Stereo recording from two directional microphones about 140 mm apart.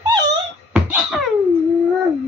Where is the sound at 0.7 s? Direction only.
5° right (ahead or behind).